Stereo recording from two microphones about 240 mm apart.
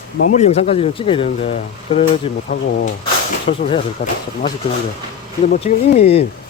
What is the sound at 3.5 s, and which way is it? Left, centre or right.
Speech, left.